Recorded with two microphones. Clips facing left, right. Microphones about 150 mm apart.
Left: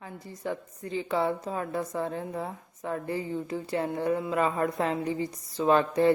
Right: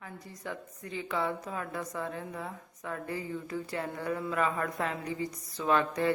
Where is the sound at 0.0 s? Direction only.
30° left (ahead or behind).